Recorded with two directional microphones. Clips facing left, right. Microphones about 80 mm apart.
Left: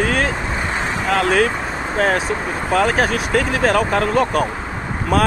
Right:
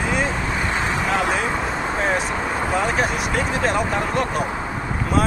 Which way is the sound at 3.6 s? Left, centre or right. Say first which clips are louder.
Left 4 dB; left.